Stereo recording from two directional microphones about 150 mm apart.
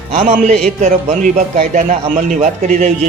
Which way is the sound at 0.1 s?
40° right (ahead or behind).